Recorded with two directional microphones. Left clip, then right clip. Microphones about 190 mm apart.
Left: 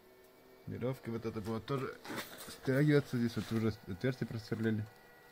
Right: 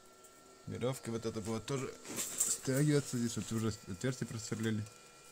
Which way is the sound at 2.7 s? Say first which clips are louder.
Left 4 dB; 15° left (ahead or behind).